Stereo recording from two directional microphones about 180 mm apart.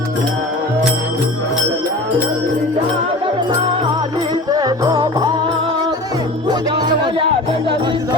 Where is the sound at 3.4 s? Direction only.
25° right (ahead or behind).